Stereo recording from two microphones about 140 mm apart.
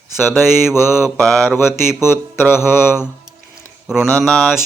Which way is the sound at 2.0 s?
15° left (ahead or behind).